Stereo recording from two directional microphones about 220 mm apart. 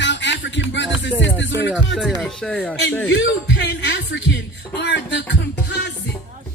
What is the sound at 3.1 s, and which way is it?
Speech, 55° left (ahead or behind).